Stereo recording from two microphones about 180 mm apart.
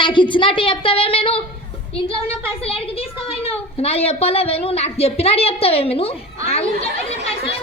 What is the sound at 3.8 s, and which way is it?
A woman's voice, 35° left (ahead or behind).